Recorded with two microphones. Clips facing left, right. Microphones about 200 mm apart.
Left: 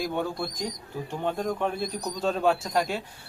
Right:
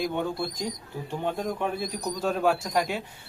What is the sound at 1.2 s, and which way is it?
Speech, 5° right (ahead or behind).